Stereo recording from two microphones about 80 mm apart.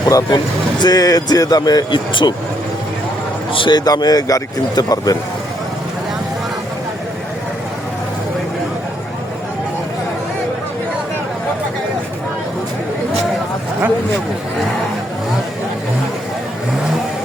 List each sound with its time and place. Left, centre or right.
0.0 s speech: left
1.9 s speech: left
3.5 s a man's voice: left